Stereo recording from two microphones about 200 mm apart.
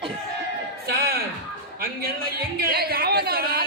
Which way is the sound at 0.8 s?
50° right (ahead or behind).